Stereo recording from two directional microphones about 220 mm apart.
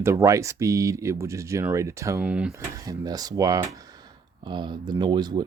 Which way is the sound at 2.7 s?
15° right (ahead or behind).